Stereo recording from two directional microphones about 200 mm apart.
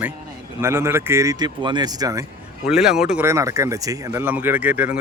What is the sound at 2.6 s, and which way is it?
Speech, centre (ahead or behind).